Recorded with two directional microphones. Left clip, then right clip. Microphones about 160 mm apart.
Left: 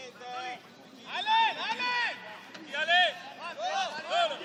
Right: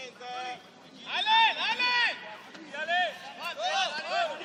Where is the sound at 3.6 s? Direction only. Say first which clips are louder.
Right 2 dB; 30° right (ahead or behind).